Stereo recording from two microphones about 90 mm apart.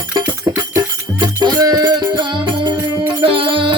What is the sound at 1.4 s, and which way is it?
Music, 50° right (ahead or behind).